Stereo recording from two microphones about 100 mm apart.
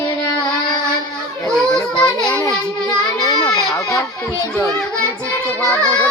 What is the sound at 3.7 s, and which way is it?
Chatter, 35° left (ahead or behind).